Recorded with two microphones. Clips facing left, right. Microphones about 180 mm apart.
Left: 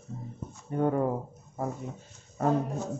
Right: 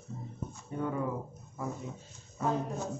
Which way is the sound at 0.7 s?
50° left (ahead or behind).